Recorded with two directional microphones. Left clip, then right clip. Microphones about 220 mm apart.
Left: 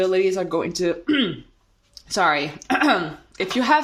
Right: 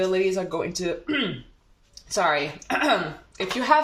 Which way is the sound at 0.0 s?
50° left (ahead or behind).